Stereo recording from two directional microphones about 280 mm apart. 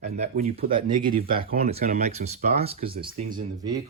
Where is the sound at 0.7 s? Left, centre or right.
Centre.